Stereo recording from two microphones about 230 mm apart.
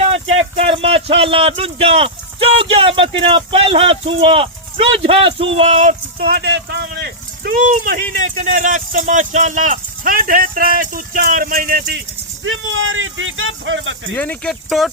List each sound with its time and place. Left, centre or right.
0.0 s speech: right
12.5 s speech: right
14.2 s speech: centre